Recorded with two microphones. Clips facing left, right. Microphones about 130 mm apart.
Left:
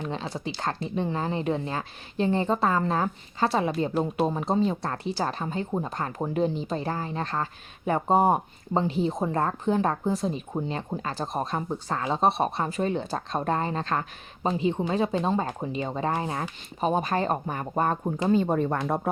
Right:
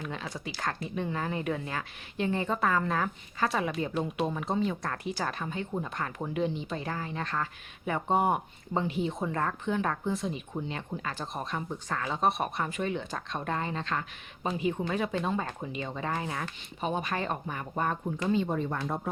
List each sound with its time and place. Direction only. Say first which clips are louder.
0.0 s speech: left 5 dB; 30° left (ahead or behind)
14.6 s speech: left 4 dB; 25° left (ahead or behind); by 18.8 s 55° left (ahead or behind)
18.8 s speech: left 6 dB; 75° left (ahead or behind)